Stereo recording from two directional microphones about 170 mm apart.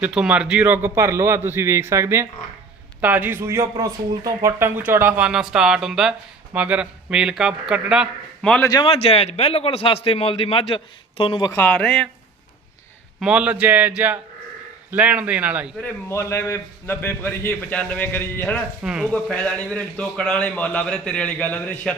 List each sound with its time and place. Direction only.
0.0 s speech: 5° right (ahead or behind)
8.7 s a man's voice: 30° left (ahead or behind)
11.5 s a man's voice: 10° left (ahead or behind)
13.1 s speech: 5° right (ahead or behind)
15.8 s a man's voice: 15° left (ahead or behind)
18.8 s speech: 5° right (ahead or behind)
19.1 s a man's voice: 5° left (ahead or behind)